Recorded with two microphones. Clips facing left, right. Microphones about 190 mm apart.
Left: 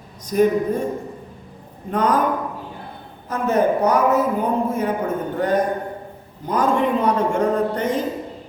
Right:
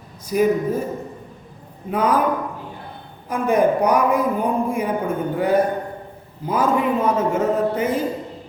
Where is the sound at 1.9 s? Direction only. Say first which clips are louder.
Even; 10° right (ahead or behind).